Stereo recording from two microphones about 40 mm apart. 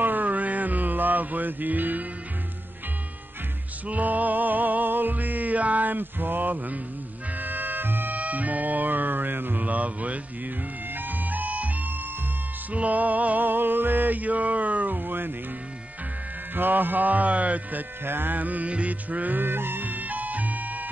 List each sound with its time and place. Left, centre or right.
0.0 s music: right
3.8 s music: right
8.2 s music: right
11.0 s music: right
12.7 s music: right
16.5 s music: right
18.0 s music: right
19.4 s music: right